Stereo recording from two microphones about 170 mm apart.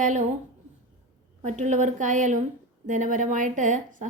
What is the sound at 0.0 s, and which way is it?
Speech, 45° right (ahead or behind).